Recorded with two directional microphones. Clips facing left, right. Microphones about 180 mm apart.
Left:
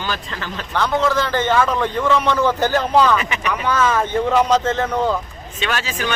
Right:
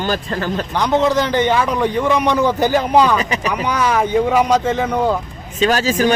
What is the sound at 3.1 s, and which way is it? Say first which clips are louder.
Speech: right 3 dB; 35° right (ahead or behind).